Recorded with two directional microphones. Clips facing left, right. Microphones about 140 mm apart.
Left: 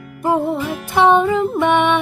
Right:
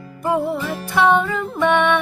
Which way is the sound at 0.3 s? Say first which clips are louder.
Left 2 dB; 20° left (ahead or behind).